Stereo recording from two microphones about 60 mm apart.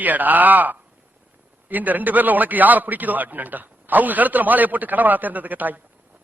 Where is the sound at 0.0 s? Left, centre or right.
Right.